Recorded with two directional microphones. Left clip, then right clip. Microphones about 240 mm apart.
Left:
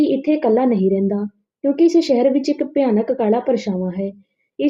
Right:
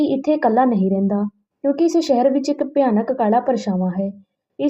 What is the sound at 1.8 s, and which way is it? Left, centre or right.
Speech, right.